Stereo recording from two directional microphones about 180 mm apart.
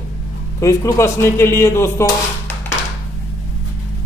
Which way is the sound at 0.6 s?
15° left (ahead or behind).